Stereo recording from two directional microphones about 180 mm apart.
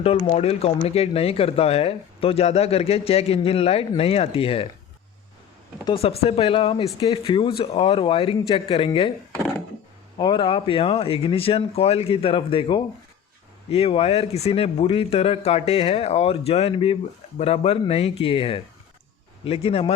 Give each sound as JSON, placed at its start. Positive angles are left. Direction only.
{"t": 0.3, "sound": "speech", "side_deg": 35}
{"t": 5.8, "sound": "speech", "side_deg": 30}
{"t": 10.2, "sound": "speech", "side_deg": 25}